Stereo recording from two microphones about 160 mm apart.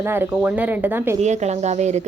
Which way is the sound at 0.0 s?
10° right (ahead or behind).